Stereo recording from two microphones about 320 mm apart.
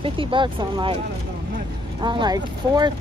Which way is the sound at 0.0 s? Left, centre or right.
Centre.